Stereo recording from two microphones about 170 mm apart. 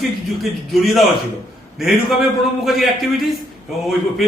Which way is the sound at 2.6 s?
Centre (ahead or behind).